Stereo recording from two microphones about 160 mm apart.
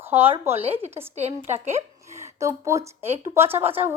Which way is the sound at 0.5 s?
40° right (ahead or behind).